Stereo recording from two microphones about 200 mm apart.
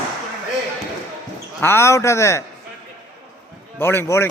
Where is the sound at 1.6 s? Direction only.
10° left (ahead or behind).